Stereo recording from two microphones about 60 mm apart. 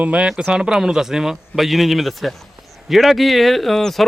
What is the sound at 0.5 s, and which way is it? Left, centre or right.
A man's voice, centre.